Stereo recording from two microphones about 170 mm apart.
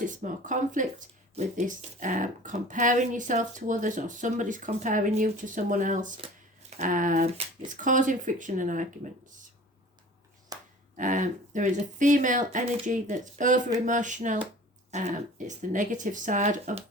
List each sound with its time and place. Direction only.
0.0 s speech: 50° right (ahead or behind)
10.5 s a sound: 20° right (ahead or behind)
10.9 s speech: 45° right (ahead or behind)